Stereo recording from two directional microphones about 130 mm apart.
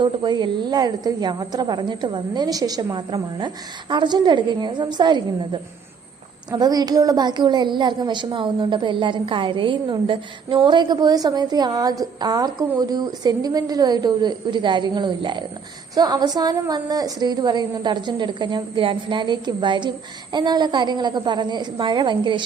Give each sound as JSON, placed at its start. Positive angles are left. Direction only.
{"t": 0.0, "sound": "a woman's voice", "side_deg": -35}
{"t": 6.5, "sound": "a woman's voice", "side_deg": -30}